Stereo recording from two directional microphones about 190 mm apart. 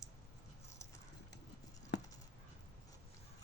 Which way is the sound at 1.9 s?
65° left (ahead or behind).